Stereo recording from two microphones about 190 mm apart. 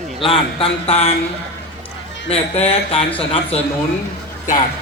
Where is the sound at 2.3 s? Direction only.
30° left (ahead or behind).